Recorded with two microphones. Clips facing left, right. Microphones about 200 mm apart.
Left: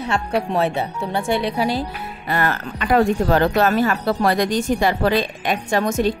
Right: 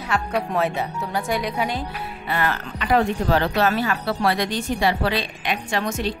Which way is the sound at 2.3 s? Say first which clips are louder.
Left 3 dB; 45° left (ahead or behind).